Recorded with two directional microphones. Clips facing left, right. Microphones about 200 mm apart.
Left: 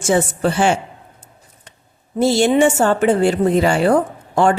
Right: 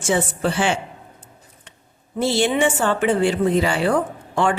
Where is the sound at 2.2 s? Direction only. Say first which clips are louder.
Left 5 dB; 45° left (ahead or behind).